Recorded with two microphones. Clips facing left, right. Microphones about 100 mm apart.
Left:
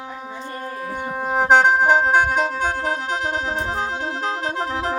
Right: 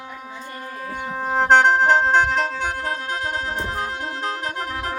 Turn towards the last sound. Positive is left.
turn(degrees=25)  # may be behind; listen again after turning